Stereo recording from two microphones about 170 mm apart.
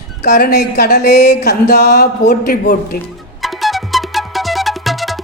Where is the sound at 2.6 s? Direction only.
60° left (ahead or behind).